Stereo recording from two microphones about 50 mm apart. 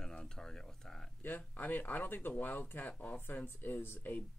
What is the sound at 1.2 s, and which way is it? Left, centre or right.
Speech, left.